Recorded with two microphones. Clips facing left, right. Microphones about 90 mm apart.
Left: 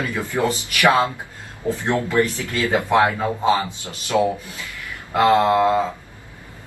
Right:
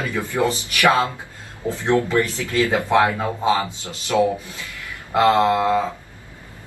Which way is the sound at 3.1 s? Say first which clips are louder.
Left 1 dB; 20° right (ahead or behind).